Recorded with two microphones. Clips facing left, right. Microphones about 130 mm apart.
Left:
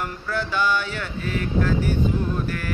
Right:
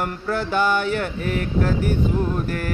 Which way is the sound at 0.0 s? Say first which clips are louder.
Right 3 dB; 50° right (ahead or behind).